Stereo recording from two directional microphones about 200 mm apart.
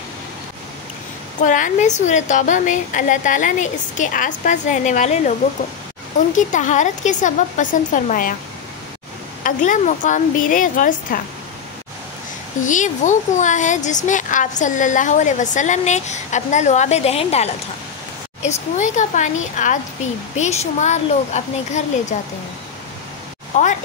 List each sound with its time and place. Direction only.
1.4 s speech: 40° left (ahead or behind)
6.3 s speech: 40° left (ahead or behind)
9.4 s speech: 40° left (ahead or behind)
12.6 s speech: 40° left (ahead or behind)